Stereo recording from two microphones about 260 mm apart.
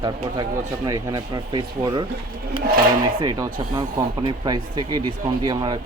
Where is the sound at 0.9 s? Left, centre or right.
Centre.